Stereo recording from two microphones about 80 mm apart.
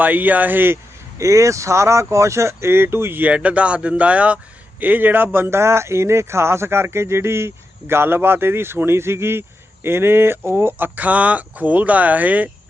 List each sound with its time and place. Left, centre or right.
0.0 s speech: right
1.2 s speech: right; by 12.5 s centre